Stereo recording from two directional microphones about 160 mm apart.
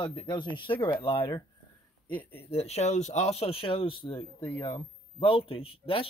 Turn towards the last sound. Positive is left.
turn(degrees=35)  # may be behind; listen again after turning